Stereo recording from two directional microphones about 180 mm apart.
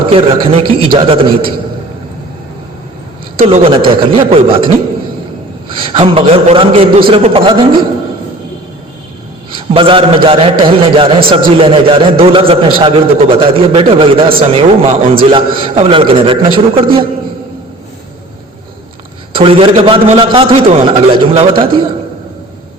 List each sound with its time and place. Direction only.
0.1 s a man's voice: 30° right (ahead or behind)
3.4 s a man's voice: 40° right (ahead or behind)
3.7 s a man's voice: 25° right (ahead or behind)
5.8 s a man's voice: 30° right (ahead or behind)
9.6 s a man's voice: 30° right (ahead or behind)
19.3 s a man's voice: 30° right (ahead or behind)